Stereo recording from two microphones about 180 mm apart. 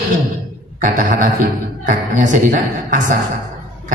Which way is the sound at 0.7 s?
45° right (ahead or behind).